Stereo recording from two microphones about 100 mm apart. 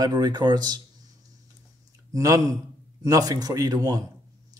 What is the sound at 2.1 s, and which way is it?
Speech, 35° right (ahead or behind).